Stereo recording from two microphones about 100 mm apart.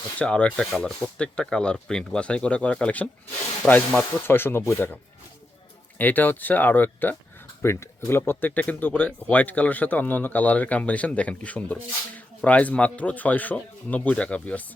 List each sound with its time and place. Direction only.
0.2 s speech: 10° left (ahead or behind)
6.0 s speech: 15° left (ahead or behind)